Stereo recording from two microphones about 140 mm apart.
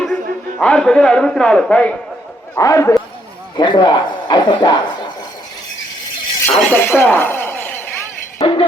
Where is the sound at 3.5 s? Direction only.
35° left (ahead or behind).